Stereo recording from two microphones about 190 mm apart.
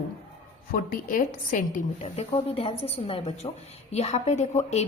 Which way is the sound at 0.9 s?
45° left (ahead or behind).